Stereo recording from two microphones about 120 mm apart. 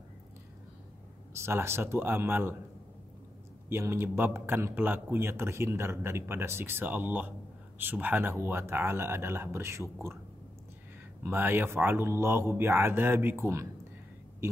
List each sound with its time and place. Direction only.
1.3 s speech: 20° right (ahead or behind)
3.6 s speech: 20° right (ahead or behind)
11.2 s speech: 15° right (ahead or behind)